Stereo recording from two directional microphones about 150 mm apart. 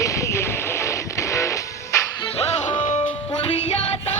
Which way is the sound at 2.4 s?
40° left (ahead or behind).